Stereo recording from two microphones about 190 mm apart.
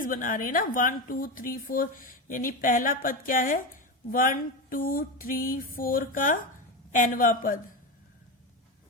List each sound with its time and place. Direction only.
0.0 s speech: 45° left (ahead or behind)